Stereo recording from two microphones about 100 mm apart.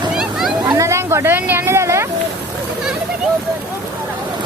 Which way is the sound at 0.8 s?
30° right (ahead or behind).